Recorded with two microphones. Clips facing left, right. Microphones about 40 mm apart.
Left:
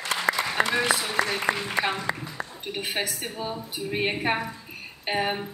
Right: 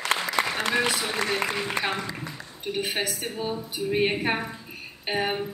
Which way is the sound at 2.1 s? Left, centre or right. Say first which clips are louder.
Left 6 dB; left.